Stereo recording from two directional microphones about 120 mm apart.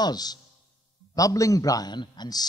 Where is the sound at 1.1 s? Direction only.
30° left (ahead or behind).